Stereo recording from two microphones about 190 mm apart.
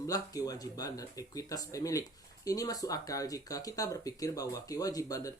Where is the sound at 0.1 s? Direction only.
20° left (ahead or behind).